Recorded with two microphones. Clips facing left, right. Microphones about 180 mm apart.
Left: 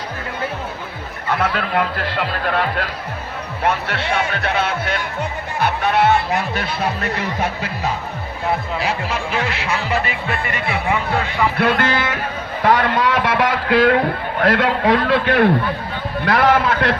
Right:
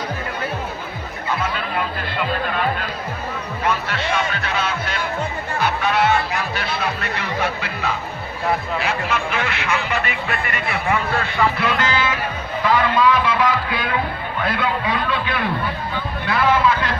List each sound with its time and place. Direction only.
1.3 s a man's voice: 75° left (ahead or behind)
3.6 s speech: 60° left (ahead or behind); by 10.3 s 30° left (ahead or behind)
10.9 s speech: 15° left (ahead or behind)
11.5 s a man's voice: 60° left (ahead or behind)